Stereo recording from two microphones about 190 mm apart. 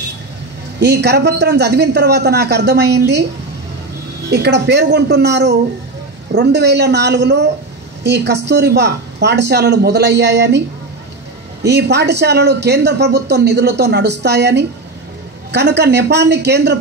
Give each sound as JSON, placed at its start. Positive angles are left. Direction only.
{"t": 0.7, "sound": "speech", "side_deg": -60}
{"t": 4.3, "sound": "speech", "side_deg": -60}
{"t": 11.6, "sound": "speech", "side_deg": -60}